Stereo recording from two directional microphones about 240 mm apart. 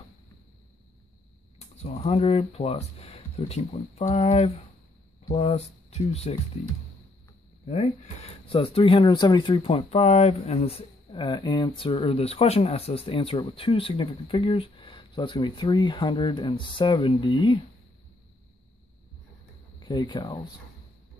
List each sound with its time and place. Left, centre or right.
1.6 s speech: left
7.6 s speech: left
19.8 s speech: centre